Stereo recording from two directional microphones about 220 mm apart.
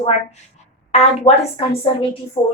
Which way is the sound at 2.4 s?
15° left (ahead or behind).